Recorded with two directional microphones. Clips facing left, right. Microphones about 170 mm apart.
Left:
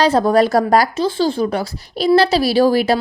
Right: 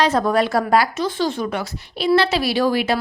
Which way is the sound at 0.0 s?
35° left (ahead or behind).